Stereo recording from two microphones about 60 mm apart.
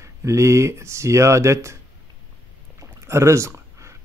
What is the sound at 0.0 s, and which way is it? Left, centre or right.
Speech, right.